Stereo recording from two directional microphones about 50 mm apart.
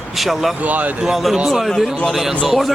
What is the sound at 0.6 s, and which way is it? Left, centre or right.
Speech, right.